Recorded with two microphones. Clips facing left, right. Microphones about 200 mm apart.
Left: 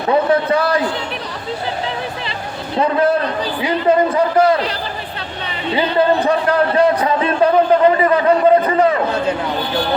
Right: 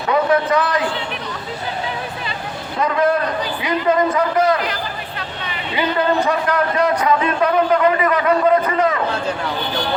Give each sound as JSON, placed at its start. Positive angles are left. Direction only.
{"t": 0.1, "sound": "a man's voice", "side_deg": 30}
{"t": 2.7, "sound": "a man's voice", "side_deg": 30}
{"t": 5.7, "sound": "a man's voice", "side_deg": 30}